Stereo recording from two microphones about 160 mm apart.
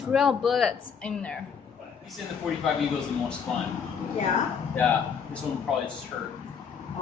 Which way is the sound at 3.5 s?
5° left (ahead or behind).